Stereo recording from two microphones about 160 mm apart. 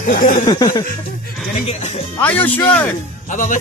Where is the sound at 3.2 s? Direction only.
55° left (ahead or behind).